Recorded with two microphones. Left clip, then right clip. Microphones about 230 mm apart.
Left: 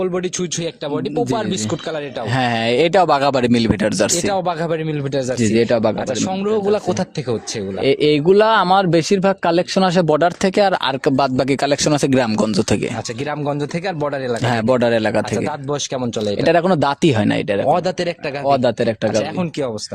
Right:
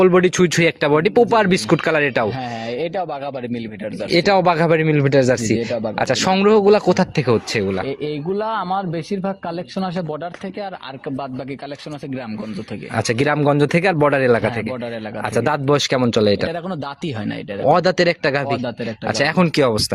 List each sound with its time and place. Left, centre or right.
0.0 s speech: right
2.7 s speech: left
4.3 s speech: centre
5.5 s speech: left
6.2 s speech: right
7.9 s speech: left
11.9 s speech: left
13.4 s speech: centre
15.7 s speech: centre
16.5 s speech: left
17.7 s speech: centre
18.4 s speech: left
19.1 s speech: right